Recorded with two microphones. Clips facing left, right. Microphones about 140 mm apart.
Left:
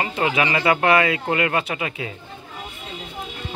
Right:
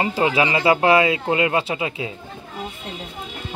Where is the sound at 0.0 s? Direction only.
25° right (ahead or behind).